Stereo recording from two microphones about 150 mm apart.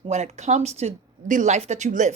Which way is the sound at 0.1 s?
50° right (ahead or behind).